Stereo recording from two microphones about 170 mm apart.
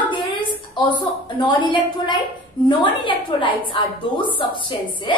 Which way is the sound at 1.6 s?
30° left (ahead or behind).